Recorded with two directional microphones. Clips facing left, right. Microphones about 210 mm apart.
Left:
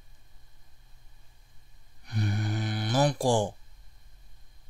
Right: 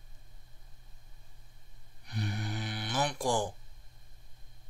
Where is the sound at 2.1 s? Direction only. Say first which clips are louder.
Left 5 dB; 50° left (ahead or behind); by 3.5 s 30° left (ahead or behind).